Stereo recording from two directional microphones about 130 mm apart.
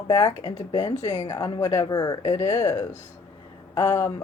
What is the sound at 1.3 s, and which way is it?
Speech, 30° left (ahead or behind).